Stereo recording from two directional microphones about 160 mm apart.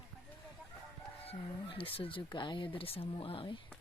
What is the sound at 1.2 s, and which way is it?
Speech, 35° left (ahead or behind).